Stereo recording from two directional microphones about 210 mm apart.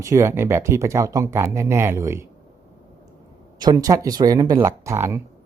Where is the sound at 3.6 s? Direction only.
20° right (ahead or behind).